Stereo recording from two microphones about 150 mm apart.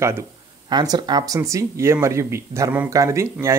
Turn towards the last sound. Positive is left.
turn(degrees=-20)  # may be behind; listen again after turning